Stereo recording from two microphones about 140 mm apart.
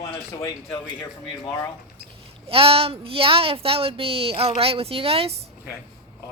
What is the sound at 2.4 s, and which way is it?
Speech, 40° right (ahead or behind).